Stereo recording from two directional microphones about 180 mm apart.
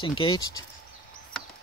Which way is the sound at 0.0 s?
25° left (ahead or behind).